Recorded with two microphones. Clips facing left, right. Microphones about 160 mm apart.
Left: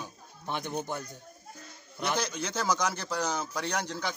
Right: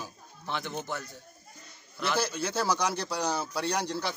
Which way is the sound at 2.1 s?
10° right (ahead or behind).